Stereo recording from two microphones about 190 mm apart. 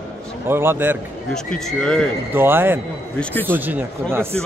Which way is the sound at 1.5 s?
5° left (ahead or behind).